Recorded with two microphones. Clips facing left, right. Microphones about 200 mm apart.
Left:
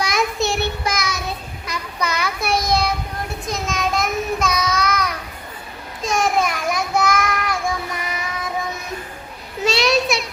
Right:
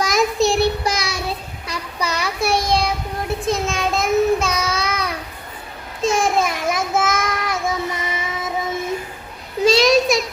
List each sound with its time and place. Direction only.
0.0 s child singing: 40° right (ahead or behind)
4.6 s child singing: 10° right (ahead or behind)
6.0 s child singing: 25° right (ahead or behind)
9.7 s a sound: 40° right (ahead or behind)